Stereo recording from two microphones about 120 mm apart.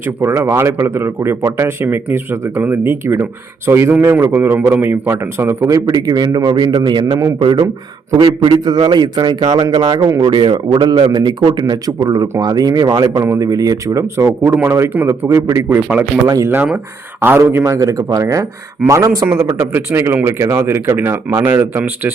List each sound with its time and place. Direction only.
0.0 s a man's voice: 20° right (ahead or behind)